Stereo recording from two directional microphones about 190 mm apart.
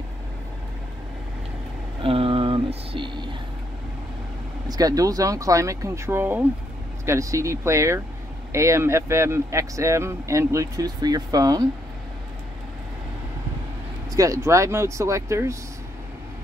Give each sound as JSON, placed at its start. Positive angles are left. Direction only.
{"t": 2.0, "sound": "a sound", "side_deg": -30}
{"t": 4.6, "sound": "speech", "side_deg": -20}
{"t": 14.1, "sound": "speech", "side_deg": -15}